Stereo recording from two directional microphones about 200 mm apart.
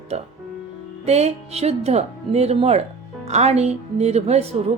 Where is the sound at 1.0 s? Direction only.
30° right (ahead or behind).